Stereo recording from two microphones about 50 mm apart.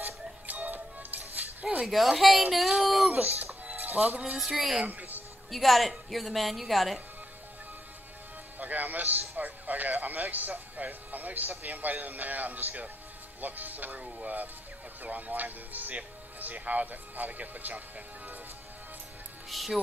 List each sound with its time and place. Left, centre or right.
0.5 s music: right
1.9 s a woman's voice: centre
2.8 s a sound: centre
3.1 s speech: right
3.6 s music: right
4.4 s a woman's voice: centre
4.8 s a sound: right
5.5 s a woman's voice: centre
8.5 s speech: right
19.5 s a woman's voice: centre